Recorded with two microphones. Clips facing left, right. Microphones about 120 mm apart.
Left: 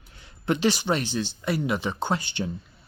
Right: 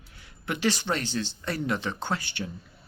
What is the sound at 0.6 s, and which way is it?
Speech, 15° left (ahead or behind).